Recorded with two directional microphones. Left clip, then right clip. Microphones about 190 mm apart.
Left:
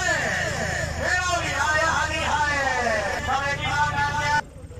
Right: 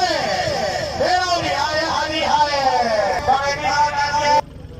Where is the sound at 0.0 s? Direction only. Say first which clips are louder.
Right 4 dB; 30° right (ahead or behind).